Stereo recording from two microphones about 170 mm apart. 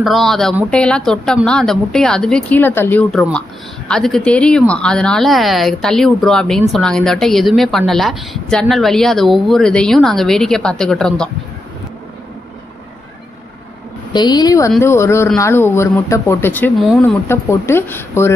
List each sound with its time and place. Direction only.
0.0 s a woman's voice: centre (ahead or behind)
3.1 s a woman's voice: centre (ahead or behind)
14.1 s a woman's voice: 25° left (ahead or behind)
16.7 s a woman's voice: centre (ahead or behind)
17.0 s speech: 15° left (ahead or behind)